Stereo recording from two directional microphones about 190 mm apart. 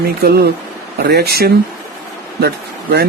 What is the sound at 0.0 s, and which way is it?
Speech, 55° right (ahead or behind).